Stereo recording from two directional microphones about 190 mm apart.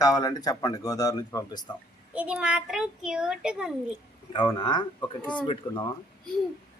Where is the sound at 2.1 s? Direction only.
5° right (ahead or behind).